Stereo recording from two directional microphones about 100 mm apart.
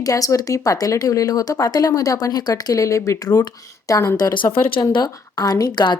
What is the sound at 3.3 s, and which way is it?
A woman's voice, 40° left (ahead or behind).